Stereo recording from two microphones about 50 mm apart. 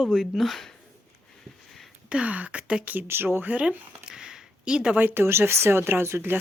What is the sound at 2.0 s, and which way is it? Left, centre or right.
Speech, right.